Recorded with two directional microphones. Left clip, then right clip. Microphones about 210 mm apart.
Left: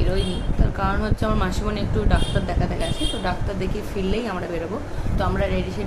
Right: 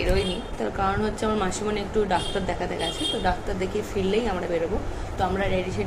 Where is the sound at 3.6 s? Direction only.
15° left (ahead or behind).